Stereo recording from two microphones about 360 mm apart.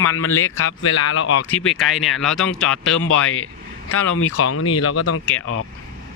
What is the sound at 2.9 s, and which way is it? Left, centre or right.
Speech, left.